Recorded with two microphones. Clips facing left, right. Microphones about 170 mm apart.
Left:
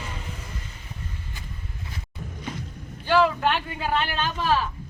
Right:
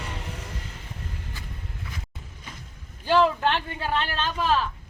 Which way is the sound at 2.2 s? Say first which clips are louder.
Left 10 dB; 65° left (ahead or behind).